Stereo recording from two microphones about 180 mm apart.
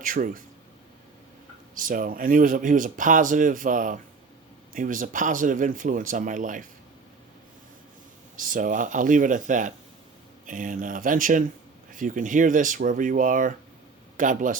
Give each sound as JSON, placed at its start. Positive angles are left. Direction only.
{"t": 0.0, "sound": "speech", "side_deg": -50}
{"t": 1.7, "sound": "speech", "side_deg": -50}
{"t": 8.4, "sound": "speech", "side_deg": -50}